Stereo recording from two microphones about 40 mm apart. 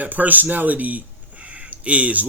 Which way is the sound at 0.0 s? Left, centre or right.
Right.